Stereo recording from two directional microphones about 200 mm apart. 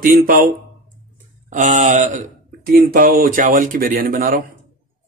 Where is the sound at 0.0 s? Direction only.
45° right (ahead or behind).